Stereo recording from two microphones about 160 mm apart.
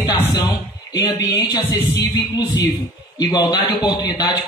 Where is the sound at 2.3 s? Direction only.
25° left (ahead or behind).